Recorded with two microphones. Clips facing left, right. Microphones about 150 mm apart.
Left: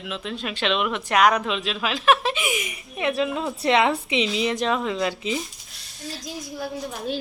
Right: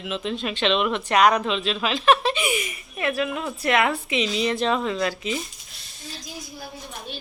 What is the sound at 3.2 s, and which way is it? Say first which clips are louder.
A woman's voice: left 2 dB; 25° left (ahead or behind).